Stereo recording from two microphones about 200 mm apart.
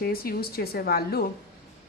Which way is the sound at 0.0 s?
50° left (ahead or behind).